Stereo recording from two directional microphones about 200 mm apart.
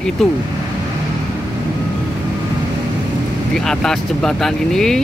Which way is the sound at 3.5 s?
5° left (ahead or behind).